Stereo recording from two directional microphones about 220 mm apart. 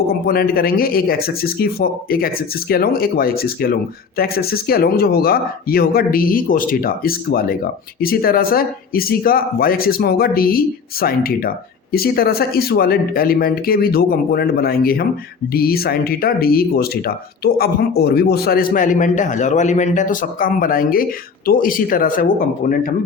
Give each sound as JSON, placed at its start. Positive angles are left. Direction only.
{"t": 0.1, "sound": "speech", "side_deg": 45}